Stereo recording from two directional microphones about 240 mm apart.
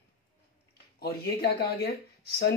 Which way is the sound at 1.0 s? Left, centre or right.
Left.